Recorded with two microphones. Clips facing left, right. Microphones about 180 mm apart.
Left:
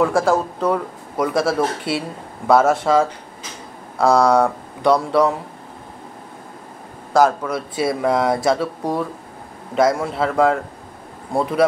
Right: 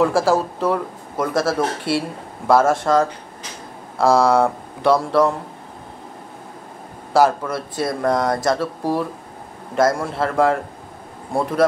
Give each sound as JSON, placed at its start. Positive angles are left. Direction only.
{"t": 0.0, "sound": "speech", "side_deg": 0}
{"t": 7.2, "sound": "speech", "side_deg": 0}